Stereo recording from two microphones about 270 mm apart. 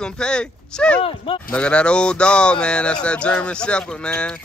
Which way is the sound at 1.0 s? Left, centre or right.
Centre.